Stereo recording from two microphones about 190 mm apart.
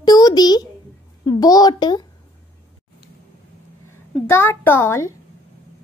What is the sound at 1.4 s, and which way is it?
Speech, 20° left (ahead or behind).